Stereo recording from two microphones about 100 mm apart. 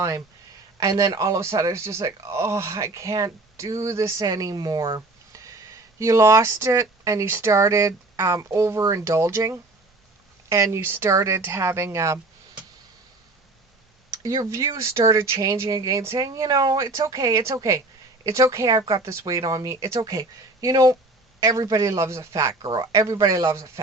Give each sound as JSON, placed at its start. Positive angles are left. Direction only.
{"t": 0.8, "sound": "speech", "side_deg": -35}
{"t": 14.2, "sound": "speech", "side_deg": -35}
{"t": 22.6, "sound": "speech", "side_deg": -45}